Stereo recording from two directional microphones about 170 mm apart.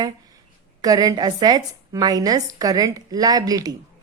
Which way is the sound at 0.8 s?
20° right (ahead or behind).